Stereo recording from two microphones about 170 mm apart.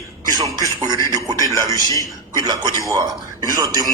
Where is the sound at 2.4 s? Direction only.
20° right (ahead or behind).